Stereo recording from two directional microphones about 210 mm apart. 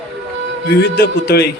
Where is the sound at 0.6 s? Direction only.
50° left (ahead or behind).